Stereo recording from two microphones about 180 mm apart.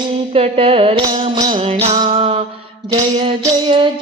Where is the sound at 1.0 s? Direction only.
25° right (ahead or behind).